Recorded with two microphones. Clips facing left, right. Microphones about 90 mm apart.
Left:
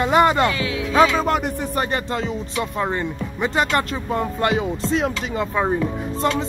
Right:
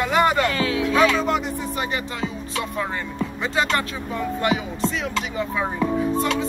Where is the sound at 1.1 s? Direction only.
45° left (ahead or behind).